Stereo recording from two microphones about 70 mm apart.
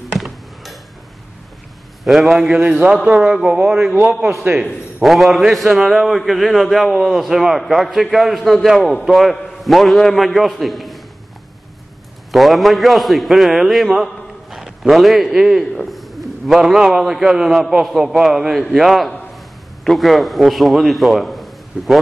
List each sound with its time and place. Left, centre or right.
2.0 s a man's voice: centre
5.0 s a man's voice: centre
12.3 s a man's voice: centre